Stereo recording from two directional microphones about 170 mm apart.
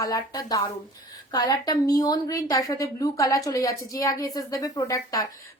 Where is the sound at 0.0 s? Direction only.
20° left (ahead or behind).